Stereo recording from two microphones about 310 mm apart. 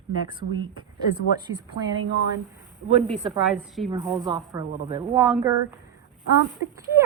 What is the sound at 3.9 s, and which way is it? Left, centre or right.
Speech, centre.